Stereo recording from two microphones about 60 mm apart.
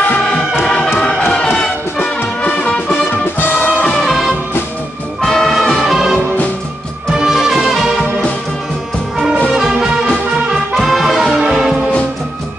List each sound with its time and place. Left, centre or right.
0.9 s music: left
5.2 s music: centre
7.2 s music: centre
9.6 s music: centre
11.2 s music: centre